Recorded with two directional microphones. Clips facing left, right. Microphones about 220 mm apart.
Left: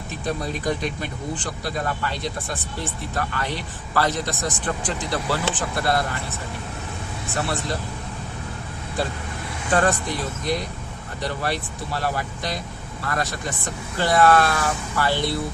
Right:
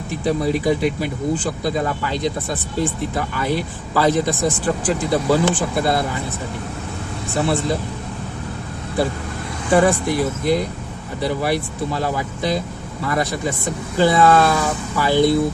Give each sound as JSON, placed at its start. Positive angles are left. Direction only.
{"t": 0.1, "sound": "speech", "side_deg": -10}
{"t": 7.3, "sound": "speech", "side_deg": -10}
{"t": 9.6, "sound": "speech", "side_deg": -10}